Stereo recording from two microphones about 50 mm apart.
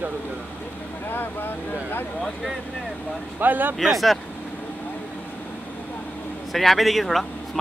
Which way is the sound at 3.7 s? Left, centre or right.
Centre.